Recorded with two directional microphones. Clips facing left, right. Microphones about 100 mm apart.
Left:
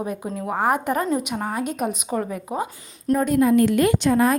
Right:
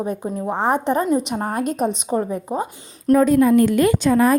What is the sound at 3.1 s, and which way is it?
Speech, 45° right (ahead or behind).